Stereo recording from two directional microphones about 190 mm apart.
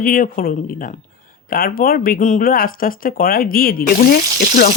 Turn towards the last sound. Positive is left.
turn(degrees=50)  # may be behind; listen again after turning